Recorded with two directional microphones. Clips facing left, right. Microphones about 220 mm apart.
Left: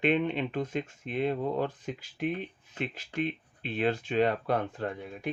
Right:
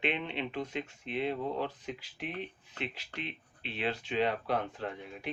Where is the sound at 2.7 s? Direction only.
50° left (ahead or behind).